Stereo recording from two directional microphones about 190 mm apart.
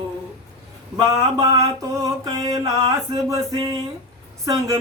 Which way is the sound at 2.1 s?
20° right (ahead or behind).